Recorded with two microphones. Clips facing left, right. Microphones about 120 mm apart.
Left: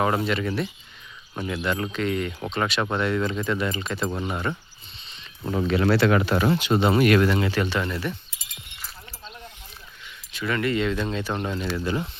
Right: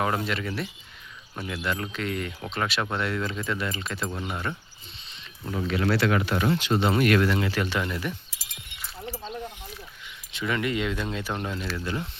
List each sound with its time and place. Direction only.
0.0 s speech: 5° left (ahead or behind)
5.4 s speech: 45° left (ahead or behind)
5.6 s speech: 30° left (ahead or behind)
6.6 s speech: 10° left (ahead or behind); by 8.1 s 10° right (ahead or behind)
10.3 s speech: 15° right (ahead or behind); by 12.0 s 5° left (ahead or behind)